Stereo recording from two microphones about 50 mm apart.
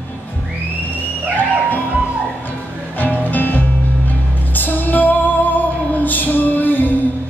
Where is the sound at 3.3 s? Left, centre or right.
Left.